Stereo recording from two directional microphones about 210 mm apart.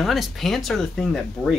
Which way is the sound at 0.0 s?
Centre (ahead or behind).